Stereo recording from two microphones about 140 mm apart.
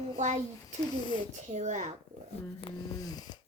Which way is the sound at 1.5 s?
55° right (ahead or behind).